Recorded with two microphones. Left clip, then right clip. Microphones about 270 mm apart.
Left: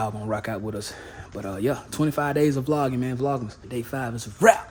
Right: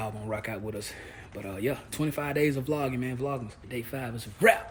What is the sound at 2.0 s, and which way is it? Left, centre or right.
A man's voice, centre.